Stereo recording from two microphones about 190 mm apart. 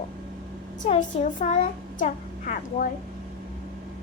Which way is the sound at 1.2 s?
40° left (ahead or behind).